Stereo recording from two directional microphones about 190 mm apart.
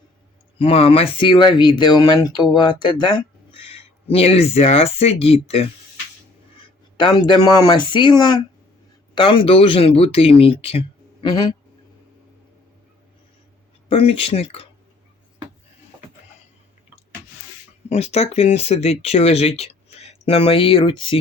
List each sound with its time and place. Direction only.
0.6 s speech: 30° left (ahead or behind)
6.9 s speech: 25° left (ahead or behind)
13.8 s speech: 30° left (ahead or behind)
17.8 s speech: 35° left (ahead or behind)